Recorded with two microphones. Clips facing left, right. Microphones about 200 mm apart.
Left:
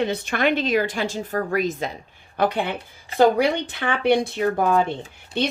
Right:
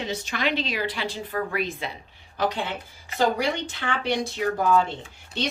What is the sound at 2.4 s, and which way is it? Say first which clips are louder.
A woman's voice: left 4 dB; 60° left (ahead or behind).